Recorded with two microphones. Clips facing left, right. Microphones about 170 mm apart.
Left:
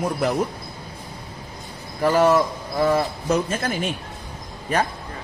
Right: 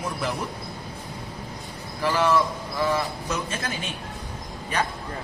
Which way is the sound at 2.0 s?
45° left (ahead or behind).